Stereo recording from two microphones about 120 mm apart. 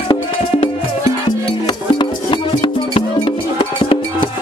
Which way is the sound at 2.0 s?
40° left (ahead or behind).